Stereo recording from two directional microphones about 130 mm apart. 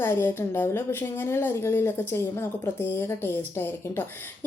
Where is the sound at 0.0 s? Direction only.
15° left (ahead or behind).